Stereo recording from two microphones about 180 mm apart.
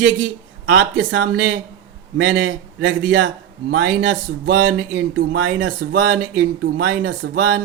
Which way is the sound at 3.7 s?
60° right (ahead or behind).